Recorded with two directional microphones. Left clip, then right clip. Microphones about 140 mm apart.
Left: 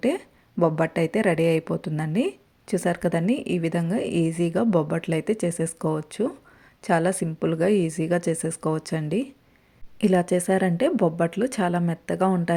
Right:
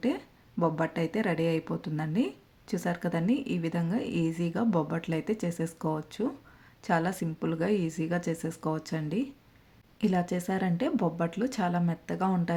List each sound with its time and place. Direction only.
0.0 s speech: 40° left (ahead or behind)